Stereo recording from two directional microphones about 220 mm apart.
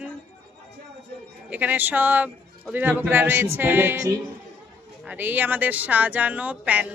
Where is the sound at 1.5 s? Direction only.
5° right (ahead or behind).